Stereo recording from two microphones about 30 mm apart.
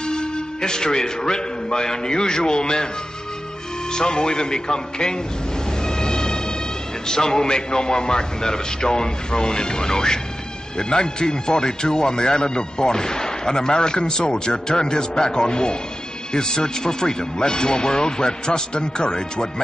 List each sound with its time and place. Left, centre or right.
0.0 s speech: left
3.9 s speech: left
5.9 s music: left
7.1 s speech: left